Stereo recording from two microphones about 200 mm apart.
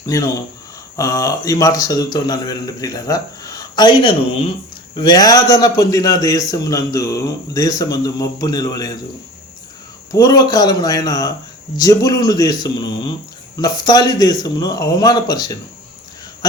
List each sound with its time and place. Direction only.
0.0 s a man's voice: 15° left (ahead or behind)
10.1 s speech: 20° left (ahead or behind)